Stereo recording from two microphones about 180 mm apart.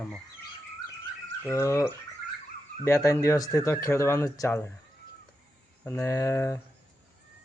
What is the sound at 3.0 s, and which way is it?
Speech, 15° left (ahead or behind).